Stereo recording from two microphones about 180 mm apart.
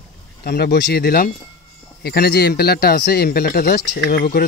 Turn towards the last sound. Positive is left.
turn(degrees=55)  # may be behind; listen again after turning